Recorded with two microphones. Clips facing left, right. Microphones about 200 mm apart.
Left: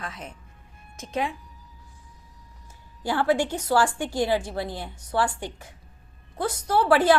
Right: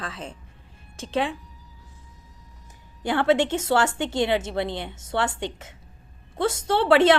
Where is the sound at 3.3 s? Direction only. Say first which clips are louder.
Right 4 dB; 25° right (ahead or behind).